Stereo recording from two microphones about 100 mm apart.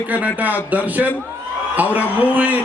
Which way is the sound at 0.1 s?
15° right (ahead or behind).